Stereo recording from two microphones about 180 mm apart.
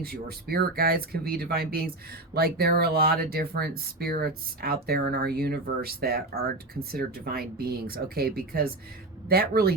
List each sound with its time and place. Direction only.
0.0 s speech: 60° right (ahead or behind)